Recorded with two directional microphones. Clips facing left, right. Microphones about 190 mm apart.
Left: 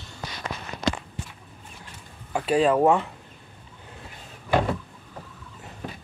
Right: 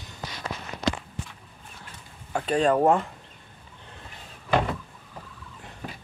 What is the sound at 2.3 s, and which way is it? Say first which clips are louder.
Speech: left 2 dB; 5° left (ahead or behind).